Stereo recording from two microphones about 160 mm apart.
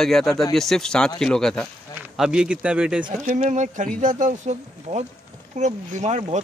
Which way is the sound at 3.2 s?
45° right (ahead or behind).